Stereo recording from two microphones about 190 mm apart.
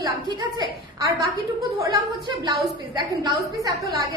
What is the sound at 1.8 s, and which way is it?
A woman's voice, 20° right (ahead or behind).